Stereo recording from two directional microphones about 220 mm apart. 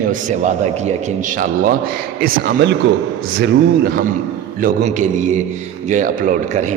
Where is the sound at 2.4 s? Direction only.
50° right (ahead or behind).